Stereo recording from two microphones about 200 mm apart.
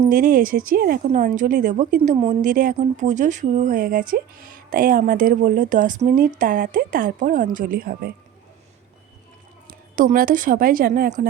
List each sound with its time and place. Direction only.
0.1 s a woman's voice: 45° right (ahead or behind)
9.6 s a woman's voice: 45° right (ahead or behind)